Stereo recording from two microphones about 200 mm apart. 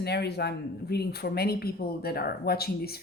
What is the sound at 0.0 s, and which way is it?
Speech, 55° left (ahead or behind).